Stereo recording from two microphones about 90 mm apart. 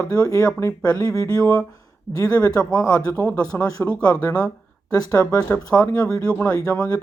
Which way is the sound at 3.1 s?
25° left (ahead or behind).